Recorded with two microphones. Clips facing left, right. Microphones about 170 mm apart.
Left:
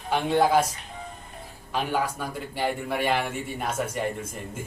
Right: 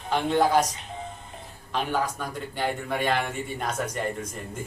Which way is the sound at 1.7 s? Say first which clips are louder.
Even; 10° left (ahead or behind).